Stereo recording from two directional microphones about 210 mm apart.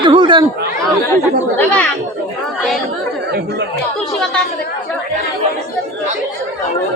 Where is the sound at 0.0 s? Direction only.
20° right (ahead or behind).